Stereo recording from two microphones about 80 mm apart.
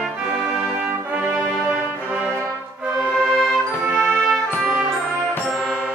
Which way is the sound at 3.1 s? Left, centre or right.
Centre.